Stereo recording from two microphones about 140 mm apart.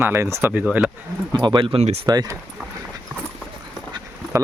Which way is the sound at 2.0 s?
30° right (ahead or behind).